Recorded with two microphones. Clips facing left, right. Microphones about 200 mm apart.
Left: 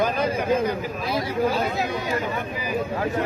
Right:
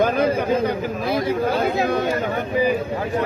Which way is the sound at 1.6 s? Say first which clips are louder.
Right 6 dB; 60° right (ahead or behind).